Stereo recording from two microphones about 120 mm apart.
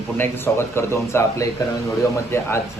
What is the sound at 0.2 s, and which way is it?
Speech, 20° left (ahead or behind).